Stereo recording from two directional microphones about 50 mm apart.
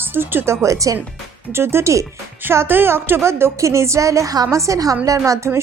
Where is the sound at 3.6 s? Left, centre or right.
Right.